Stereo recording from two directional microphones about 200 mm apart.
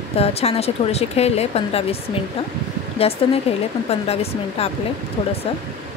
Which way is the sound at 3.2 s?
25° left (ahead or behind).